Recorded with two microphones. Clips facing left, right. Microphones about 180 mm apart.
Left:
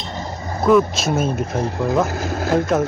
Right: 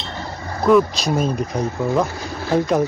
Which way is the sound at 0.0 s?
15° left (ahead or behind).